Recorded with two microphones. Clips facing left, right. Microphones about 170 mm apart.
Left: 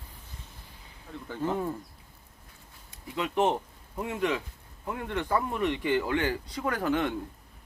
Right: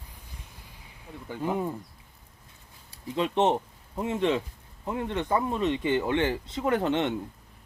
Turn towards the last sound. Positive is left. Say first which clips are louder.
# right 3 dB
turn(degrees=-25)  # may be behind; listen again after turning